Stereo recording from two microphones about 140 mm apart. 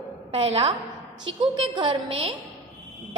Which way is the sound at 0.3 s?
45° right (ahead or behind).